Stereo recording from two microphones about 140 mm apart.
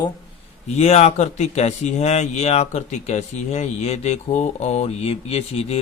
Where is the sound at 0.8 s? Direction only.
50° left (ahead or behind).